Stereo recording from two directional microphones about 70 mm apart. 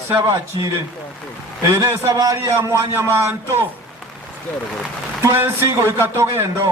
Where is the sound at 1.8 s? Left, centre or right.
Right.